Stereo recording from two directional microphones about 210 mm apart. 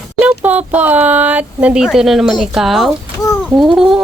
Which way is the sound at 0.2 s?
5° right (ahead or behind).